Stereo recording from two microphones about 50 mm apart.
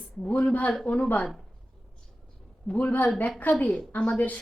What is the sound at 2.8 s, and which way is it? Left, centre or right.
A woman's voice, left.